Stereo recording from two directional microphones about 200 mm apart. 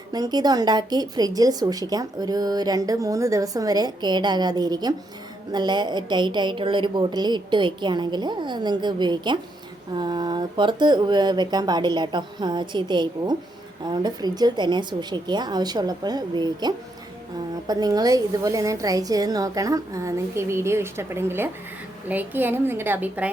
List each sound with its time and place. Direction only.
0.1 s a woman's voice: 20° right (ahead or behind)